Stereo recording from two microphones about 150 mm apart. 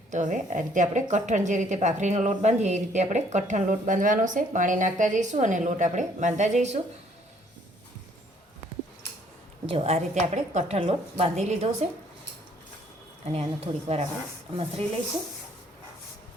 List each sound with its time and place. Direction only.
0.1 s a woman's voice: 55° right (ahead or behind)
9.6 s a woman's voice: 40° right (ahead or behind)
10.8 s a woman's voice: 40° right (ahead or behind)
13.6 s a woman's voice: 40° right (ahead or behind)